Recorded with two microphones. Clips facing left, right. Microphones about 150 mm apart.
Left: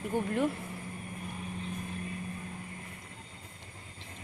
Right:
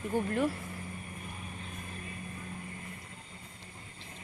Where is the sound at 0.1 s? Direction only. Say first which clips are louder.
Even; 20° left (ahead or behind).